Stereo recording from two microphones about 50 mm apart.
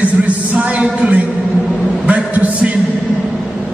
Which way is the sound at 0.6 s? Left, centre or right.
Right.